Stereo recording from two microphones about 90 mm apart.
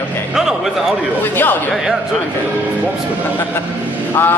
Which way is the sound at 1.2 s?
20° left (ahead or behind).